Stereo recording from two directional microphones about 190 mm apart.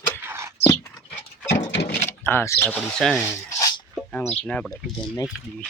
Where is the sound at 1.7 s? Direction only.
60° left (ahead or behind).